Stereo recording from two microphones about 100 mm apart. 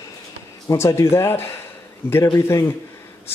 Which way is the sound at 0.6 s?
30° left (ahead or behind).